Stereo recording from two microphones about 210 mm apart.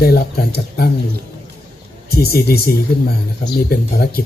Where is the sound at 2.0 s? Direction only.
50° left (ahead or behind).